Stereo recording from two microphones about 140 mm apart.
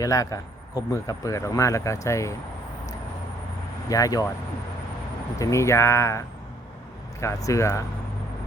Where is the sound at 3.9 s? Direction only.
25° left (ahead or behind).